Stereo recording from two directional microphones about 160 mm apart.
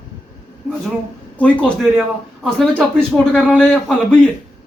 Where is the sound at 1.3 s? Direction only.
5° left (ahead or behind).